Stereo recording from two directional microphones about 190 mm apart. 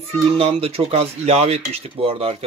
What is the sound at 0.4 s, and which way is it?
Speech, 30° right (ahead or behind).